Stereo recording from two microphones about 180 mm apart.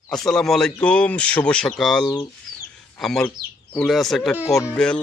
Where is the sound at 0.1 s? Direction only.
Centre (ahead or behind).